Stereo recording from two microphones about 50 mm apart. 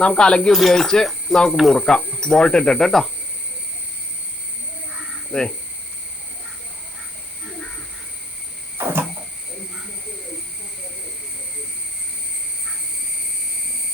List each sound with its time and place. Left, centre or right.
0.0 s speech: centre
5.3 s speech: centre
8.8 s a sound: right